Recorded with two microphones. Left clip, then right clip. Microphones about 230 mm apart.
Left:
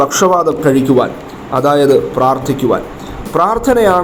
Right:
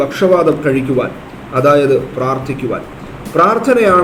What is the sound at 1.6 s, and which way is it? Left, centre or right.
Speech, left.